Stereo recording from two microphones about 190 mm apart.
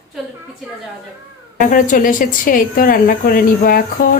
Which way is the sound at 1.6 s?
45° left (ahead or behind).